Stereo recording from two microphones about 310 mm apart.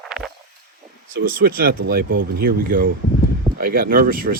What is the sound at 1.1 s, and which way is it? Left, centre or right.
Speech, right.